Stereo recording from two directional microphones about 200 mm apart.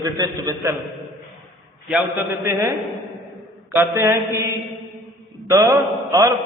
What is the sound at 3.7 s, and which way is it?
A man's voice, 15° right (ahead or behind).